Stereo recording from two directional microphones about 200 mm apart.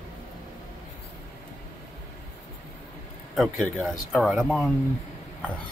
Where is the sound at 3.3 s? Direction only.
Centre (ahead or behind).